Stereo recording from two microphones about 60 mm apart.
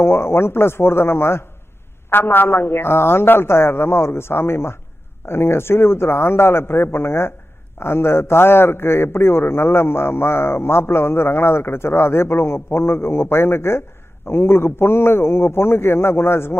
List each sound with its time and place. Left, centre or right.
0.0 s a man's voice: left